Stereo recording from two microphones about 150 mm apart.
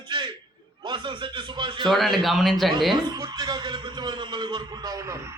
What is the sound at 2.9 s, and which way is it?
A man's voice, 25° right (ahead or behind).